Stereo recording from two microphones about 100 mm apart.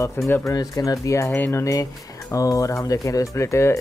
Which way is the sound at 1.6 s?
35° left (ahead or behind).